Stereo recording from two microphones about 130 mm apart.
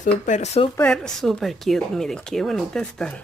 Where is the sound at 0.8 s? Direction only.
5° left (ahead or behind).